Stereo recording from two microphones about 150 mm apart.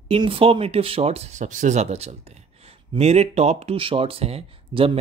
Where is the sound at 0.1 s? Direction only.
40° right (ahead or behind).